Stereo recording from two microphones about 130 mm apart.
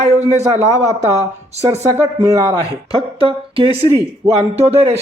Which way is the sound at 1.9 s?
20° right (ahead or behind).